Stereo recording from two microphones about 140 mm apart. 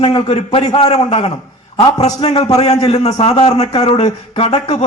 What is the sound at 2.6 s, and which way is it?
A man's voice, 45° left (ahead or behind).